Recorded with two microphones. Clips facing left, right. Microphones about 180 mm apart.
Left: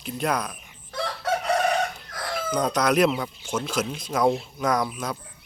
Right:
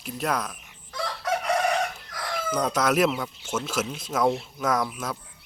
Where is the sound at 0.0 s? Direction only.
Centre (ahead or behind).